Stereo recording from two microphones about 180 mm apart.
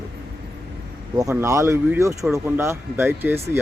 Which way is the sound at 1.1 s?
15° right (ahead or behind).